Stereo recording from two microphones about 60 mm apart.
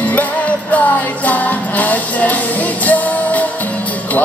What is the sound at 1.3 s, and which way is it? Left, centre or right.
Music, left.